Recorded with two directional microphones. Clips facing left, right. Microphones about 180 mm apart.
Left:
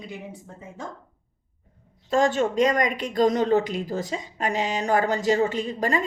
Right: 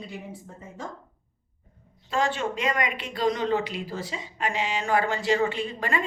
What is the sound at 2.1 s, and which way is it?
Speech, 45° left (ahead or behind).